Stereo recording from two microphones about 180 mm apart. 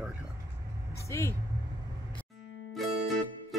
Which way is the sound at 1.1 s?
15° left (ahead or behind).